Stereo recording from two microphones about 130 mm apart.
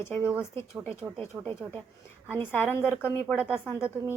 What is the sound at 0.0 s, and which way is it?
Speech, 20° left (ahead or behind).